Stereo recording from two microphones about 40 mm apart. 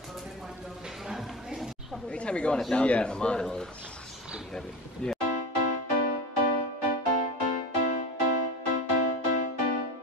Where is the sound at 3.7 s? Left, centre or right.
Left.